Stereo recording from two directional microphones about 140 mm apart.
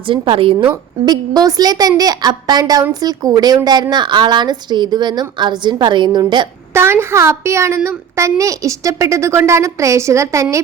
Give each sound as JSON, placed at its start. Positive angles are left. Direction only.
{"t": 0.1, "sound": "a woman's voice", "side_deg": -40}
{"t": 6.7, "sound": "a woman's voice", "side_deg": -20}